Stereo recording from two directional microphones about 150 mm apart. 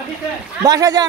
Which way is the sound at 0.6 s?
25° right (ahead or behind).